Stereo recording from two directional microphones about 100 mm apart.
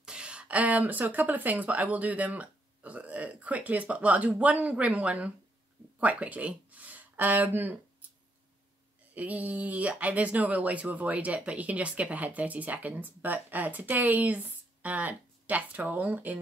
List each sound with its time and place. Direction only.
0.0 s speech: 10° right (ahead or behind)
9.1 s speech: 15° right (ahead or behind)